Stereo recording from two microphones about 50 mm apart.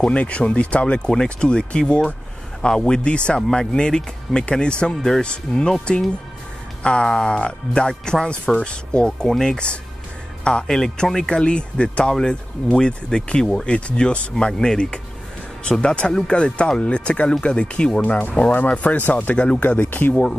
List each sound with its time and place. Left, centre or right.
0.0 s speech: left
6.8 s speech: left
18.5 s speech: left
19.3 s speech: centre
19.6 s speech: left